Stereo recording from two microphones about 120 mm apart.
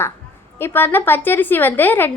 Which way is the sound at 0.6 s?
15° left (ahead or behind).